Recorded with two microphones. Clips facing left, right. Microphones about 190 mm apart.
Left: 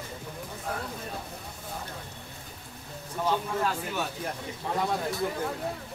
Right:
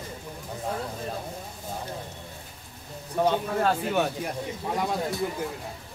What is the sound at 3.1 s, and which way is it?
Speech, 60° right (ahead or behind).